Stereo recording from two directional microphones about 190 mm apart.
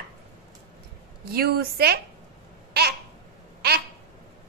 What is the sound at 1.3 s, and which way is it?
Speech, 55° right (ahead or behind).